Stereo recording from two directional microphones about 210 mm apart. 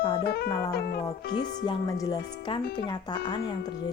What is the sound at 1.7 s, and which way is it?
Speech, 15° left (ahead or behind).